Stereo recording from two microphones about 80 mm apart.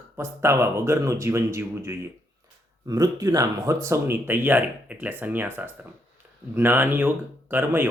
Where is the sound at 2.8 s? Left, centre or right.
Right.